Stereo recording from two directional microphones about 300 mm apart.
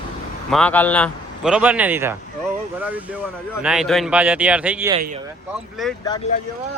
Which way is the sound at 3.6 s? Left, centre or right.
Centre.